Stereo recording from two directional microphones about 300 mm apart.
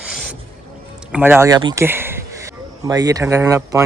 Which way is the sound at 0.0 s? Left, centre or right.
Centre.